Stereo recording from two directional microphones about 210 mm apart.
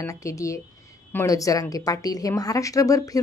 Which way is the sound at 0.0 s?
15° left (ahead or behind).